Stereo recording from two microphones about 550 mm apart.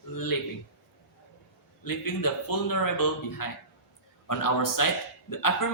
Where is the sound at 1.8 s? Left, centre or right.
Left.